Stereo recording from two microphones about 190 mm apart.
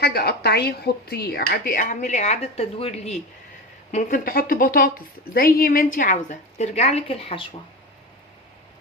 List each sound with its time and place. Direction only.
0.0 s a woman's voice: 55° left (ahead or behind); by 3.2 s 35° left (ahead or behind)
3.9 s a woman's voice: 50° left (ahead or behind); by 7.4 s 30° left (ahead or behind)